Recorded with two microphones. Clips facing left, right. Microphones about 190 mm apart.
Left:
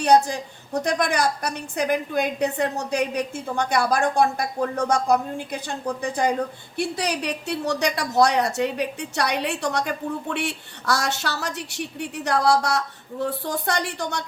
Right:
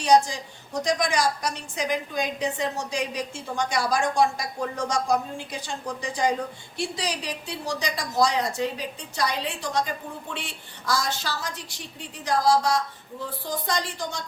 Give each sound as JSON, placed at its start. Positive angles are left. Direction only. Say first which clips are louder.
{"t": 0.0, "sound": "a woman's voice", "louder": "left 2 dB", "side_deg": 60}